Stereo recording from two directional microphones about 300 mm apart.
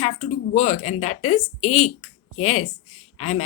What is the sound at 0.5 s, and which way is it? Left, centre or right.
Speech, left.